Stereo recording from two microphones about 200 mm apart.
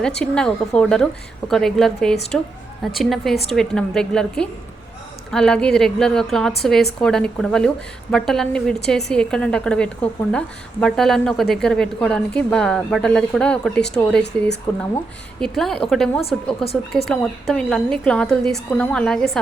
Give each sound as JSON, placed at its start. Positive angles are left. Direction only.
{"t": 0.0, "sound": "a woman's voice", "side_deg": 5}